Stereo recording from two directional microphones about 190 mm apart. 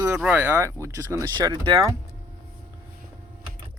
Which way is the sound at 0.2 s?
5° right (ahead or behind).